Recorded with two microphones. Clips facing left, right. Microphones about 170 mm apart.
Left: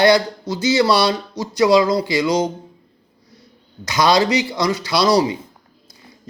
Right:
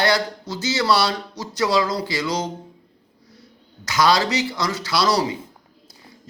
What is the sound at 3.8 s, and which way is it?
Speech, 20° left (ahead or behind).